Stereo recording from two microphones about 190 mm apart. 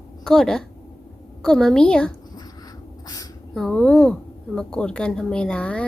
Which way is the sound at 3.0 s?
20° left (ahead or behind).